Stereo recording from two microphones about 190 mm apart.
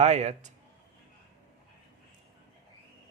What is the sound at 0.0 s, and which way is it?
Speech, 35° right (ahead or behind).